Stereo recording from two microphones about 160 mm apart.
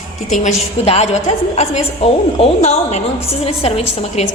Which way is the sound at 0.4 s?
45° left (ahead or behind).